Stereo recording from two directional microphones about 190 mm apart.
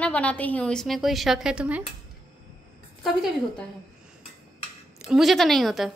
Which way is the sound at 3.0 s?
Centre (ahead or behind).